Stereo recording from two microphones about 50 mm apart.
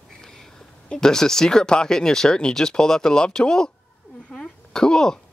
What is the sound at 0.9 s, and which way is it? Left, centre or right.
A woman's voice, centre.